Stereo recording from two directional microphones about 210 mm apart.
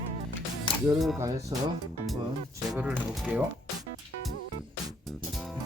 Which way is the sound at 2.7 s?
5° right (ahead or behind).